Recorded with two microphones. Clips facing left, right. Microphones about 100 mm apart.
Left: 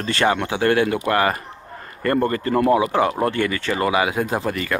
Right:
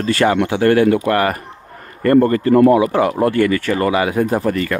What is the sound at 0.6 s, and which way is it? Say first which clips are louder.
Speech: right 6 dB; 40° right (ahead or behind).